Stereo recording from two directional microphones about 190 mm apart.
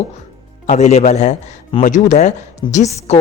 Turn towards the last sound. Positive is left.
turn(degrees=35)  # may be behind; listen again after turning